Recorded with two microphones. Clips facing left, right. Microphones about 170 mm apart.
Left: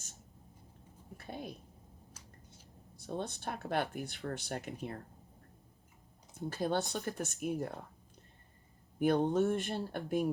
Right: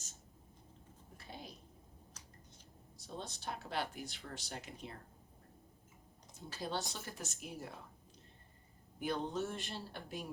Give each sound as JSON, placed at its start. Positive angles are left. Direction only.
{"t": 1.1, "sound": "a sound", "side_deg": 55}
{"t": 3.0, "sound": "speech", "side_deg": 60}
{"t": 6.3, "sound": "speech", "side_deg": 55}
{"t": 9.0, "sound": "speech", "side_deg": 55}